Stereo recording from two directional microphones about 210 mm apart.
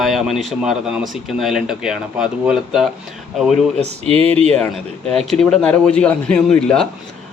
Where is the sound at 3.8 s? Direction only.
30° right (ahead or behind).